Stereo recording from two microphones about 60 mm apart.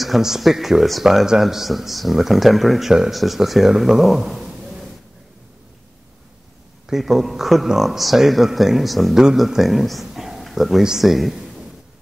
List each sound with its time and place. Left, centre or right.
0.0 s speech: centre
4.6 s a sound: centre
6.9 s speech: centre